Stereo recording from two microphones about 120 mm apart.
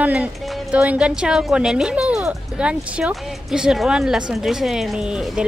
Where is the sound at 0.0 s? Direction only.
10° right (ahead or behind).